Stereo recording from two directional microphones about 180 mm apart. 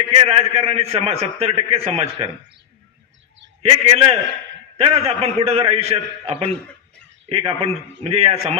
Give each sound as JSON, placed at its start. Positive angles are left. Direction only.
{"t": 0.1, "sound": "a man's voice", "side_deg": -35}
{"t": 3.6, "sound": "a man's voice", "side_deg": -35}